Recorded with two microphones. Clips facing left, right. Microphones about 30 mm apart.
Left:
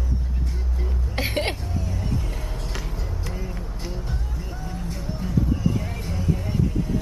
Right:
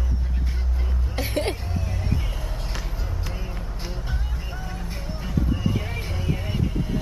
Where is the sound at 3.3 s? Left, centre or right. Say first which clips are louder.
Left 1 dB; centre.